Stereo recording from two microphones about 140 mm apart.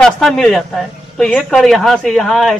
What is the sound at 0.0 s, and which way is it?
A man's voice, 5° left (ahead or behind).